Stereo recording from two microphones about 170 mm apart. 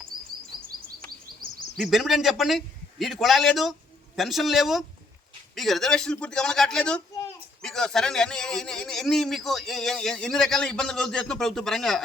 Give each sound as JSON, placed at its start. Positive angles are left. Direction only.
{"t": 1.7, "sound": "a man's voice", "side_deg": 0}